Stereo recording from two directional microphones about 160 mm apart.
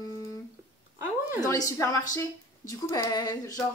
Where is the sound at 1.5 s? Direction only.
20° left (ahead or behind).